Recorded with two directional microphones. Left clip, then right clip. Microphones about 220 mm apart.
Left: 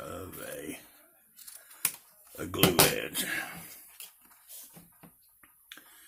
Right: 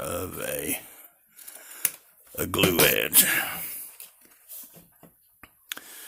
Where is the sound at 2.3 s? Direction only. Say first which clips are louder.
Right 3 dB; 50° right (ahead or behind).